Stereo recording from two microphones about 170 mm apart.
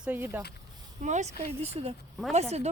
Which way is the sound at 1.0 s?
45° right (ahead or behind).